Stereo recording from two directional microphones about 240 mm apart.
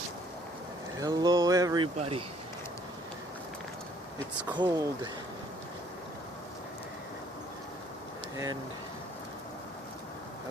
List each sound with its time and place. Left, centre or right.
0.9 s speech: centre
4.5 s speech: centre